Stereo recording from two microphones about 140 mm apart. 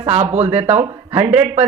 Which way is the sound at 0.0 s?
45° right (ahead or behind).